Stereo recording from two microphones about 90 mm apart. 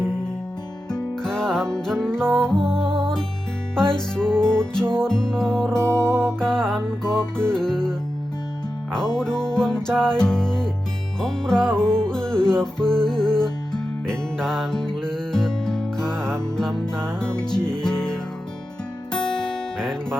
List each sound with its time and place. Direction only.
0.9 s music: 5° left (ahead or behind)
5.7 s music: 30° right (ahead or behind)
6.4 s music: 5° left (ahead or behind)
9.1 s music: 10° left (ahead or behind)